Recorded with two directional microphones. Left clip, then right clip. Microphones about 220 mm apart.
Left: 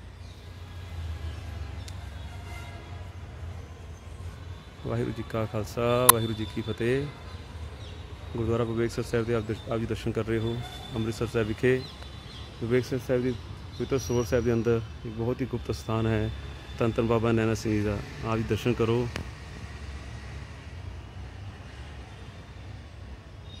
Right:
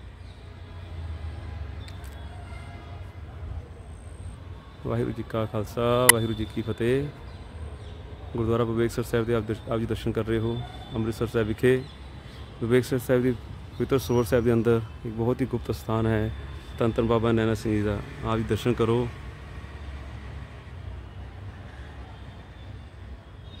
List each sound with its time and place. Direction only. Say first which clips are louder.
4.8 s speech: right 3 dB; 5° right (ahead or behind)
8.4 s speech: right 3 dB; 10° right (ahead or behind)